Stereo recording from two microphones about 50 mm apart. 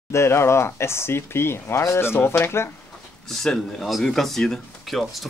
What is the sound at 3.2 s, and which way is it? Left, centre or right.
Speech, centre.